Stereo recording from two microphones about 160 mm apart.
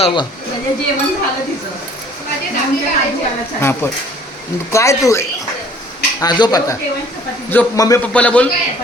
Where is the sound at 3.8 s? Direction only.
15° left (ahead or behind).